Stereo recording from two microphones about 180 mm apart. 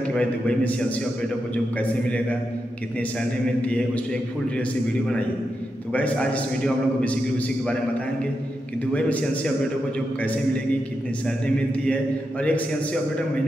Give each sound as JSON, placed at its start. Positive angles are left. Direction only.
{"t": 0.1, "sound": "a man's voice", "side_deg": 5}
{"t": 3.6, "sound": "a man's voice", "side_deg": 5}
{"t": 5.9, "sound": "a man's voice", "side_deg": 10}
{"t": 8.9, "sound": "a man's voice", "side_deg": 5}